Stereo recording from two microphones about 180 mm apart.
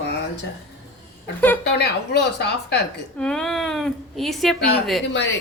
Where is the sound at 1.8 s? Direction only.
65° left (ahead or behind).